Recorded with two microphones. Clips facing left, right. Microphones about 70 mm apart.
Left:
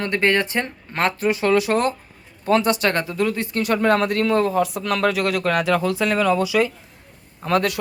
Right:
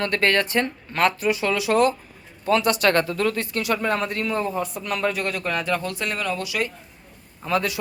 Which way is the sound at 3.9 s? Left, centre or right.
Left.